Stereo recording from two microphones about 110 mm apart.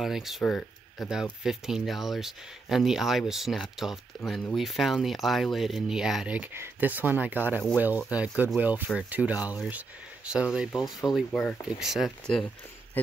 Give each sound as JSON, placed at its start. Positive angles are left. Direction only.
{"t": 0.0, "sound": "speech", "side_deg": -5}
{"t": 13.0, "sound": "speech", "side_deg": 15}